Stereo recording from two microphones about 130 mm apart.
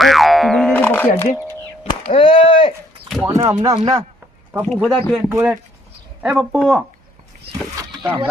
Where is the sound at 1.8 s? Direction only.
45° left (ahead or behind).